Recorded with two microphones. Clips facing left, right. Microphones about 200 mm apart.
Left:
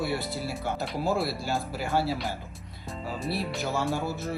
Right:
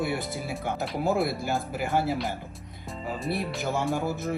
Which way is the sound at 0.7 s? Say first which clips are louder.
Right 2 dB; 20° right (ahead or behind).